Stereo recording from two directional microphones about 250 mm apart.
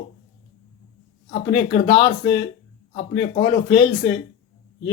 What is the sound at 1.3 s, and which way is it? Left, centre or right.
Speech, left.